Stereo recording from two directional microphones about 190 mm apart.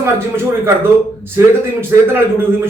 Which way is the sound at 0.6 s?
10° right (ahead or behind).